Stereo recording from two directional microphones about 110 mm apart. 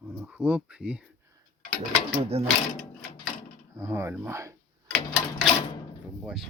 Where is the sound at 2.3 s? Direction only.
70° right (ahead or behind).